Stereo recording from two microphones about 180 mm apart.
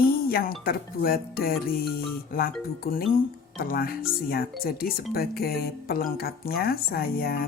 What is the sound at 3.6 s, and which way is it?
Speech, 55° left (ahead or behind).